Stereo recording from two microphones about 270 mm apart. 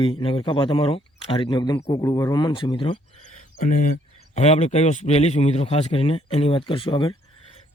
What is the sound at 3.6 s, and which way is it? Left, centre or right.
Speech, left.